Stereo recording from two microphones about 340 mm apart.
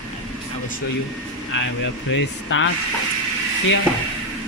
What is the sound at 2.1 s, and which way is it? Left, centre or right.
Speech, left.